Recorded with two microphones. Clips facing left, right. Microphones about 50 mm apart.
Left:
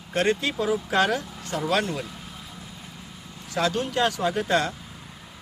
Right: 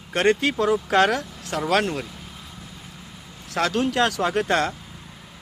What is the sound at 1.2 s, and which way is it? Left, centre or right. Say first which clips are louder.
Speech: left 1 dB; centre.